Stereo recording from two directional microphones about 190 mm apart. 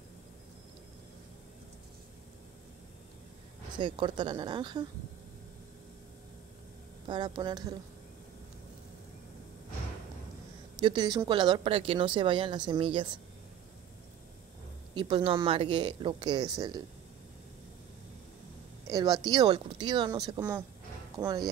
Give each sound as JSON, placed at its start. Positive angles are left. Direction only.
{"t": 3.7, "sound": "speech", "side_deg": -25}
{"t": 7.1, "sound": "speech", "side_deg": -25}
{"t": 10.8, "sound": "speech", "side_deg": -25}
{"t": 15.0, "sound": "speech", "side_deg": -25}
{"t": 18.9, "sound": "speech", "side_deg": -20}